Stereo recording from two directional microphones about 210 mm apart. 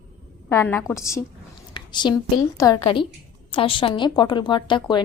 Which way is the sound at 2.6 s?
20° left (ahead or behind).